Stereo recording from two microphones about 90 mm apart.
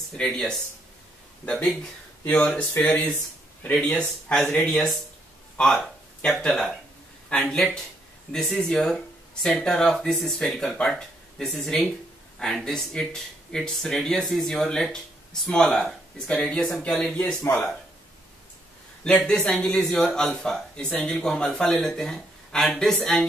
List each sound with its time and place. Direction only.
0.2 s speech: 5° left (ahead or behind)
4.4 s speech: 15° left (ahead or behind)
5.6 s speech: 5° left (ahead or behind)
19.0 s speech: 5° left (ahead or behind)